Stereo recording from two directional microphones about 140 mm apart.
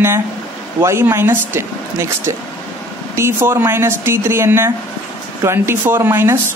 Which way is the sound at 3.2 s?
15° right (ahead or behind).